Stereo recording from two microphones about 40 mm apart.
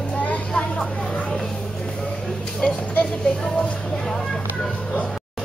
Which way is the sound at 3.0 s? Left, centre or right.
Left.